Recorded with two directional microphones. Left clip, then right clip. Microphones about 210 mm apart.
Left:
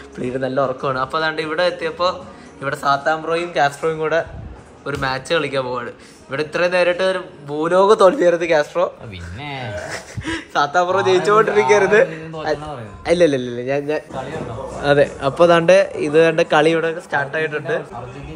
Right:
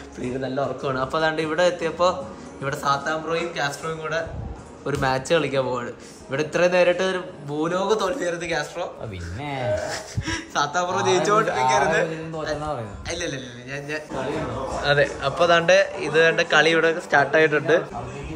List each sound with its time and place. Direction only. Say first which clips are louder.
0.4 s a man's voice: left 7 dB; centre (ahead or behind)
3.5 s a man's voice: left 9 dB; 15° left (ahead or behind)
4.8 s a man's voice: left 1 dB; 10° right (ahead or behind)
7.8 s a man's voice: left 14 dB; 10° left (ahead or behind)
10.2 s a man's voice: left 6 dB; centre (ahead or behind)
11.4 s a man's voice: left 5 dB; 25° left (ahead or behind)
16.7 s a man's voice: right 1 dB; 5° left (ahead or behind)